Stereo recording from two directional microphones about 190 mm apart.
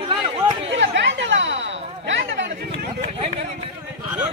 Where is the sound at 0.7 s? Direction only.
70° right (ahead or behind).